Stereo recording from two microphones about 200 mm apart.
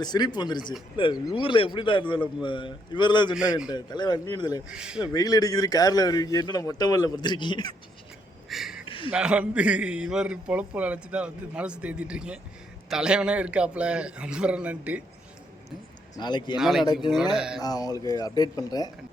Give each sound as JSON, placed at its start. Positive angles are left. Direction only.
{"t": 0.0, "sound": "speech", "side_deg": 20}
{"t": 3.3, "sound": "a man's voice", "side_deg": -5}
{"t": 3.7, "sound": "speech", "side_deg": 20}
{"t": 4.7, "sound": "a man's voice", "side_deg": -5}
{"t": 5.1, "sound": "speech", "side_deg": 20}
{"t": 8.4, "sound": "a sound", "side_deg": 0}
{"t": 9.0, "sound": "a man's voice", "side_deg": -5}
{"t": 16.1, "sound": "speech", "side_deg": 20}
{"t": 16.6, "sound": "a man's voice", "side_deg": 0}
{"t": 16.8, "sound": "speech", "side_deg": 20}
{"t": 17.3, "sound": "a man's voice", "side_deg": -5}
{"t": 17.6, "sound": "speech", "side_deg": 20}